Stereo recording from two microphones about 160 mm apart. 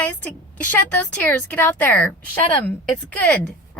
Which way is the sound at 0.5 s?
10° left (ahead or behind).